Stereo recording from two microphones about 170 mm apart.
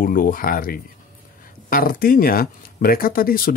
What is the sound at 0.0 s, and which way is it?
Speech, 55° left (ahead or behind).